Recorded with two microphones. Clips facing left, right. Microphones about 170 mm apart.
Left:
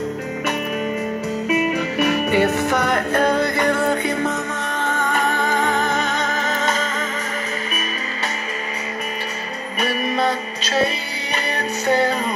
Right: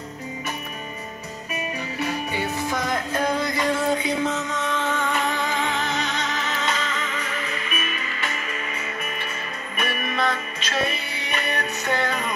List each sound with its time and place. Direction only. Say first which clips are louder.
1.5 s music: left 9 dB; 90° left; by 7.1 s 45° left (ahead or behind)
9.8 s music: left 5 dB; 35° left (ahead or behind)